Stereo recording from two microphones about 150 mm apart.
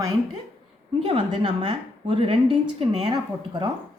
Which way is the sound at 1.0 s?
40° right (ahead or behind).